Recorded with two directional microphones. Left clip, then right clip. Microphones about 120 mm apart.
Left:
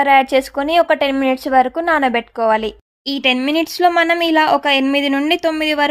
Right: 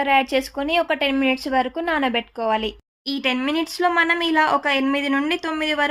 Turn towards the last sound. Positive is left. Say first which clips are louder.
# left 6 dB
turn(degrees=55)  # may be behind; listen again after turning